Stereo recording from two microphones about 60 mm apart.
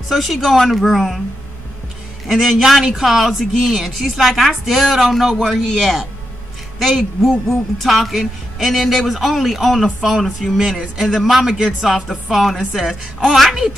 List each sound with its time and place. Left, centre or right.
0.1 s a woman's voice: centre
2.2 s a woman's voice: centre